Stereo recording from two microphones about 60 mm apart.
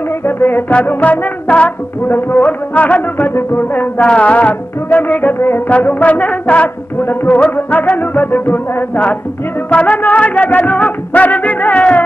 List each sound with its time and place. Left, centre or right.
0.2 s music: left
4.0 s music: left